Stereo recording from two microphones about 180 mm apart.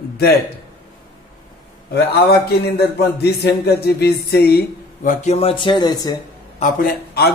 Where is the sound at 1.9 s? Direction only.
65° left (ahead or behind).